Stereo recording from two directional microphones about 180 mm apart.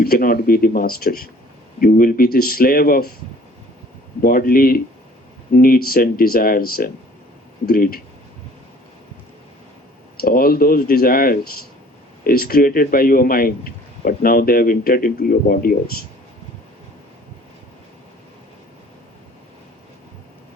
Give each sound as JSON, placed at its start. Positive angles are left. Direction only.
{"t": 0.0, "sound": "speech", "side_deg": 55}
{"t": 4.2, "sound": "a man's voice", "side_deg": 55}
{"t": 10.2, "sound": "a man's voice", "side_deg": 55}